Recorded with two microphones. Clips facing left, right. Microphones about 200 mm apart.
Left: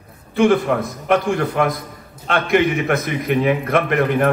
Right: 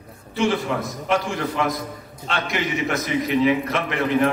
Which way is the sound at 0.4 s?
55° left (ahead or behind).